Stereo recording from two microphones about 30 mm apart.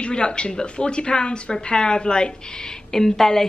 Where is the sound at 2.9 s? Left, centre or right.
Centre.